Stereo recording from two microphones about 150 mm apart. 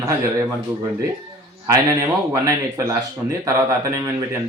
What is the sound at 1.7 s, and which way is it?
Speech, 20° right (ahead or behind).